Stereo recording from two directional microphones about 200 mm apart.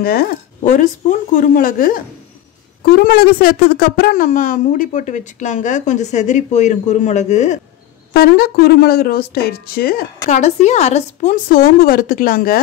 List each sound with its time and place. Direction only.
0.0 s a woman's voice: 50° left (ahead or behind)
8.1 s speech: 50° left (ahead or behind)